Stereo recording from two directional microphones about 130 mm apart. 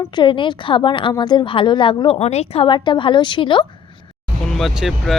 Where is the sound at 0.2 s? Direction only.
35° left (ahead or behind).